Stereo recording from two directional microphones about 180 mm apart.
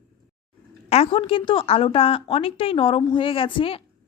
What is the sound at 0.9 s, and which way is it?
A woman's voice, 30° left (ahead or behind).